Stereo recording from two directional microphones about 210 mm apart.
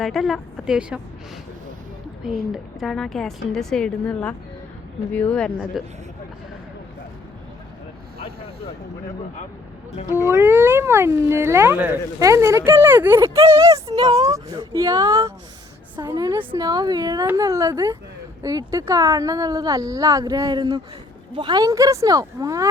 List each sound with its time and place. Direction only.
0.0 s a woman's voice: centre (ahead or behind)
2.8 s a woman's voice: centre (ahead or behind)
10.1 s speech: 15° left (ahead or behind)
10.3 s speech: 10° right (ahead or behind)